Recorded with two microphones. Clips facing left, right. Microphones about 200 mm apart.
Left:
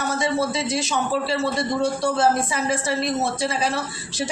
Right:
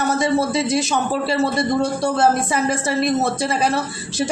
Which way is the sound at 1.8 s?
60° right (ahead or behind).